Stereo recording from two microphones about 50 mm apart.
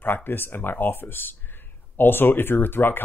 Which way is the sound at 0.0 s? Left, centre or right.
Left.